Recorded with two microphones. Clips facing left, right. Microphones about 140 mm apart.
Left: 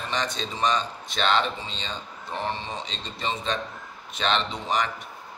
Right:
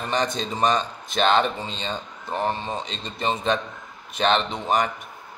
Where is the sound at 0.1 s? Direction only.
45° right (ahead or behind).